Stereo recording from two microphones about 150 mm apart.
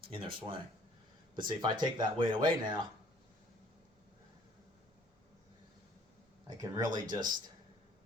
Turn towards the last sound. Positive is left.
turn(degrees=-30)  # may be behind; listen again after turning